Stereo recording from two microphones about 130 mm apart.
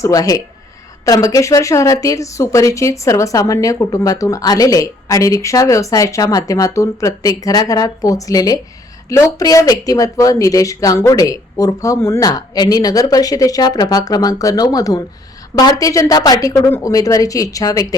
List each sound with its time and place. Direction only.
0.0 s speech: 25° left (ahead or behind)